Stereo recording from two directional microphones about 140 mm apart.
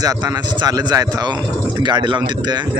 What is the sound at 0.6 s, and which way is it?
A man's voice, 30° right (ahead or behind).